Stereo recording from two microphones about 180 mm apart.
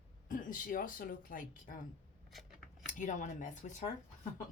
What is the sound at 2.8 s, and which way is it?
Speech, 45° left (ahead or behind).